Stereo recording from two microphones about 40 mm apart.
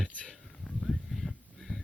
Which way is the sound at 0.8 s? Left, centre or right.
Centre.